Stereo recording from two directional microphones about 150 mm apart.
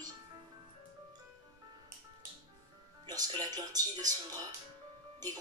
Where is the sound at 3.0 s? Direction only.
25° right (ahead or behind).